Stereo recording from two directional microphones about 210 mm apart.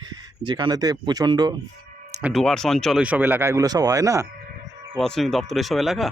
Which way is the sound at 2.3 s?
Centre (ahead or behind).